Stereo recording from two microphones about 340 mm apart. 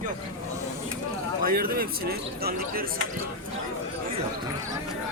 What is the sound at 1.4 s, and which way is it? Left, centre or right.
A man's voice, right.